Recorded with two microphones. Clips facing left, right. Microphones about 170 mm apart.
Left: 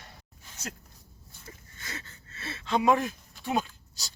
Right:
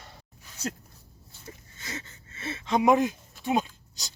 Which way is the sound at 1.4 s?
20° right (ahead or behind).